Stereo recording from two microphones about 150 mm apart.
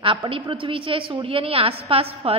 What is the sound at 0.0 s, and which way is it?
A woman's voice, 35° right (ahead or behind).